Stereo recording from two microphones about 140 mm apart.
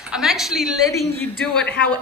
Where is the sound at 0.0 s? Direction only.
5° right (ahead or behind).